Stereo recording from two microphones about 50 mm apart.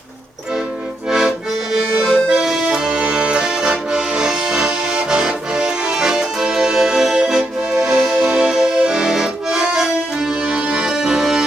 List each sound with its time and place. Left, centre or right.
1.7 s accordion: centre